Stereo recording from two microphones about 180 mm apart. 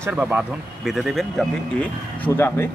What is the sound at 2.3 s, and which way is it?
Speech, 15° left (ahead or behind).